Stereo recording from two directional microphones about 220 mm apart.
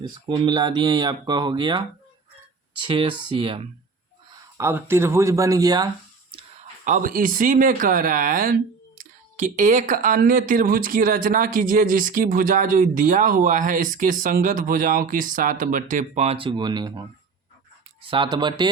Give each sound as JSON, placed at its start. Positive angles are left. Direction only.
{"t": 0.0, "sound": "speech", "side_deg": -20}
{"t": 2.8, "sound": "speech", "side_deg": -25}
{"t": 4.5, "sound": "speech", "side_deg": -10}
{"t": 6.8, "sound": "speech", "side_deg": -40}